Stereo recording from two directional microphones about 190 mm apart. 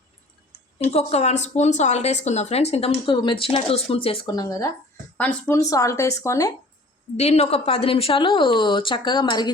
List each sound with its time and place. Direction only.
0.9 s a woman's voice: 35° left (ahead or behind); by 6.5 s 15° left (ahead or behind)
7.2 s a woman's voice: 35° left (ahead or behind)